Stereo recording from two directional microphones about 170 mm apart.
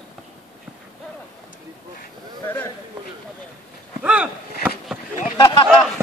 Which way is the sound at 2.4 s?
15° left (ahead or behind).